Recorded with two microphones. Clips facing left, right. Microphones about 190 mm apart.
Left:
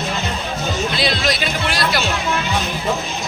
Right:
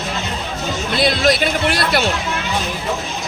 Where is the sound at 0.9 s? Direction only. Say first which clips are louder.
Right 4 dB; 55° right (ahead or behind).